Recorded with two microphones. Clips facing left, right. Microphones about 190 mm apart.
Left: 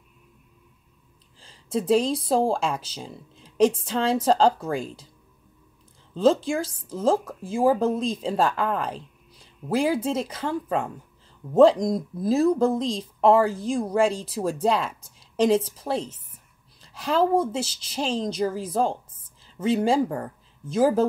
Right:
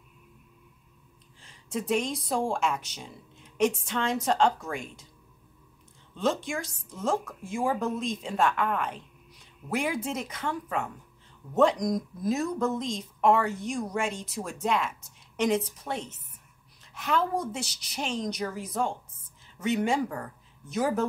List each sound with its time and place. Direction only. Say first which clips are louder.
1.4 s speech: left 6 dB; 30° left (ahead or behind)
6.4 s speech: left 7 dB; 30° left (ahead or behind)